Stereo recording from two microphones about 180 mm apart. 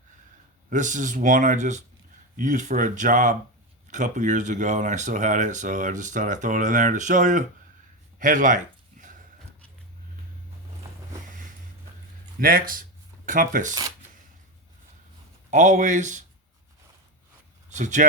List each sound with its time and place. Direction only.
0.7 s speech: 45° right (ahead or behind)
8.2 s a sound: 45° right (ahead or behind)
12.4 s speech: 50° right (ahead or behind)
13.7 s speech: 20° right (ahead or behind)
15.4 s speech: 45° right (ahead or behind)
17.7 s speech: 45° right (ahead or behind)